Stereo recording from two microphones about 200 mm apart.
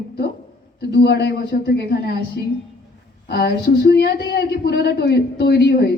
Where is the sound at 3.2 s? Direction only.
55° left (ahead or behind).